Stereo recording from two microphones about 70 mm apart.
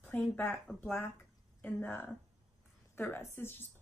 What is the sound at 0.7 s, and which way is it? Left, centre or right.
A woman's voice, left.